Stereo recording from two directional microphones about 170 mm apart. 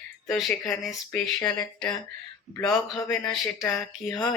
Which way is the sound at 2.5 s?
20° left (ahead or behind).